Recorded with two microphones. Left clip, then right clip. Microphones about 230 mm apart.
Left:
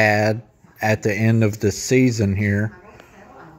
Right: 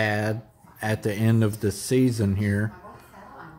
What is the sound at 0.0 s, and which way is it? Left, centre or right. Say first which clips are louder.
Speech: left 9 dB; left.